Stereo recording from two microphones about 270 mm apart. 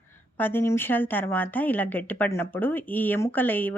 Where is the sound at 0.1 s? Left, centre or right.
Centre.